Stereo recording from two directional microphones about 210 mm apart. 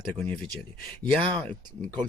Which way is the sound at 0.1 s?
5° left (ahead or behind).